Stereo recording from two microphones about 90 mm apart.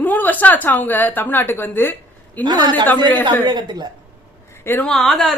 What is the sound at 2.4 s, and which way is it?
Speech, 55° right (ahead or behind).